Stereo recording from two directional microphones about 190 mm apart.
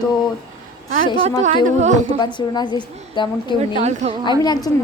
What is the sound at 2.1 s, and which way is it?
A woman's voice, 20° left (ahead or behind).